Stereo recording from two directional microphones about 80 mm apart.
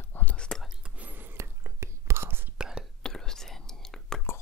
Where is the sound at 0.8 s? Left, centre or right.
Centre.